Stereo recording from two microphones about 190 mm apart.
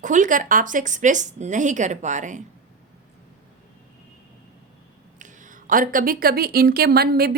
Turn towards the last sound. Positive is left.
turn(degrees=-55)  # may be behind; listen again after turning